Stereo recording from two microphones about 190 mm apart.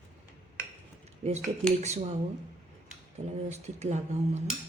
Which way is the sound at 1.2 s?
35° right (ahead or behind).